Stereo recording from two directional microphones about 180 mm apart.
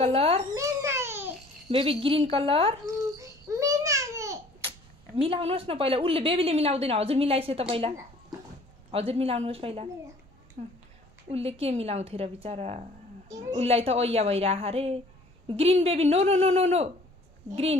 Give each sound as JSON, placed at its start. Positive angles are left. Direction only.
{"t": 0.0, "sound": "speech", "side_deg": -35}
{"t": 0.6, "sound": "a sound", "side_deg": -15}
{"t": 1.7, "sound": "speech", "side_deg": -30}
{"t": 3.2, "sound": "babbling", "side_deg": -15}
{"t": 4.6, "sound": "speech", "side_deg": -30}
{"t": 8.9, "sound": "speech", "side_deg": -35}